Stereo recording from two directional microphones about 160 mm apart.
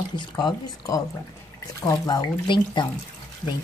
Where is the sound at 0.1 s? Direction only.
30° left (ahead or behind).